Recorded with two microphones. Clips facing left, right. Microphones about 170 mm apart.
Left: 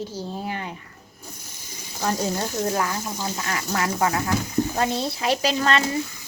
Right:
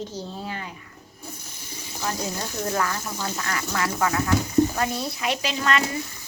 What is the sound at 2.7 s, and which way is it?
Speech, 15° left (ahead or behind).